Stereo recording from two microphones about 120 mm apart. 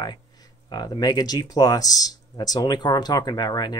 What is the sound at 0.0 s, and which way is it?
Speech, 35° left (ahead or behind).